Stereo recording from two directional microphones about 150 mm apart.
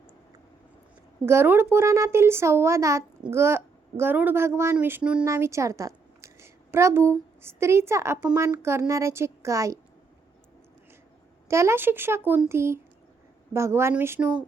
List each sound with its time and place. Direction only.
1.2 s a child's voice: 15° right (ahead or behind)
11.4 s a child's voice: 20° right (ahead or behind)